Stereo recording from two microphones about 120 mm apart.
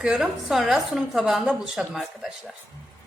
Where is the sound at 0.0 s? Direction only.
5° right (ahead or behind).